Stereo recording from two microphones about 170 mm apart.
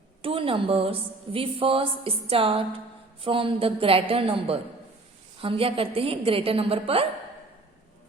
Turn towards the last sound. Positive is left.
turn(degrees=-35)  # may be behind; listen again after turning